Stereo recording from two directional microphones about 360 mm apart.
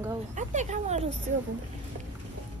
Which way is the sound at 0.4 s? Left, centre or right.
Centre.